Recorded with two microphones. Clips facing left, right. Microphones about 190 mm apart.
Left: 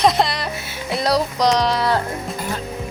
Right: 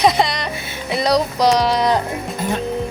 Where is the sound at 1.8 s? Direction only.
20° right (ahead or behind).